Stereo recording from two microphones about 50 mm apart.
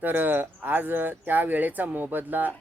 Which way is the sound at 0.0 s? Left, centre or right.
Right.